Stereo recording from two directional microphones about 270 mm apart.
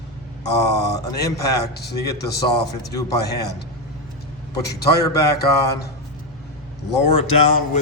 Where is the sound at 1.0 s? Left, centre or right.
Centre.